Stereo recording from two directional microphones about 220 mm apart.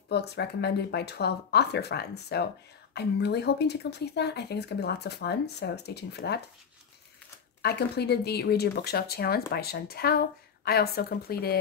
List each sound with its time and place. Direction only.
0.1 s speech: 50° left (ahead or behind)
7.6 s speech: 50° left (ahead or behind)